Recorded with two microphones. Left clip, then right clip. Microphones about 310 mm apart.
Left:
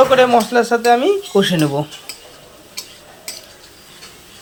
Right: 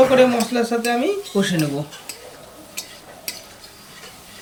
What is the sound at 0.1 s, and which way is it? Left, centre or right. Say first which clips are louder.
Speech: left 4 dB; centre.